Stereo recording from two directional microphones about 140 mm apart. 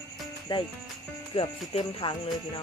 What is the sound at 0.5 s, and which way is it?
Speech, 35° left (ahead or behind).